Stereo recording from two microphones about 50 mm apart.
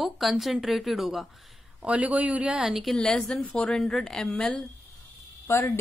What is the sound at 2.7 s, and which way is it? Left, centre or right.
Speech, centre.